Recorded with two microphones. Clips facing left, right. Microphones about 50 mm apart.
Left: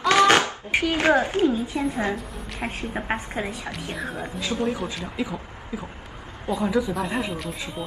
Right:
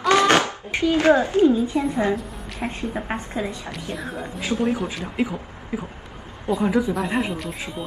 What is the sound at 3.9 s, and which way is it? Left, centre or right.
Speech, centre.